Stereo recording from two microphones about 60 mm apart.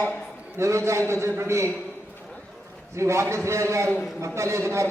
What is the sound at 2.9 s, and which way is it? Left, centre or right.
A man's voice, right.